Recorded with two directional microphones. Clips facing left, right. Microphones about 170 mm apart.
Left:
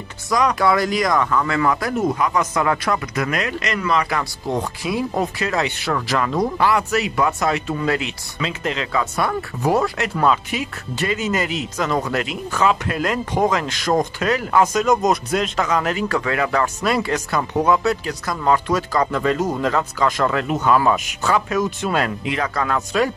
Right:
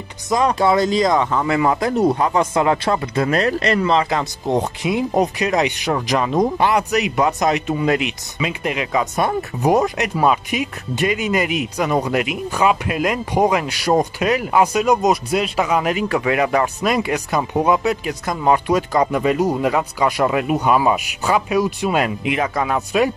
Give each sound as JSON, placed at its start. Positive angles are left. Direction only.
{"t": 0.3, "sound": "speech", "side_deg": -25}